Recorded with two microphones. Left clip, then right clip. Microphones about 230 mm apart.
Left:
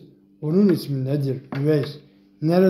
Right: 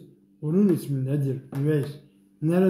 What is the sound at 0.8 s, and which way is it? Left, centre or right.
A man's voice, centre.